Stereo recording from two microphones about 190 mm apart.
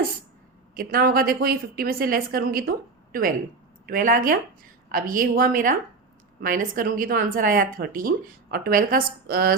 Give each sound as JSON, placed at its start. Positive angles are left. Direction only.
{"t": 0.7, "sound": "speech", "side_deg": -50}